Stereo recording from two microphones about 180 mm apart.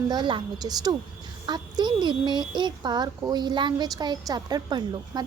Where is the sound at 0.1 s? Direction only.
25° right (ahead or behind).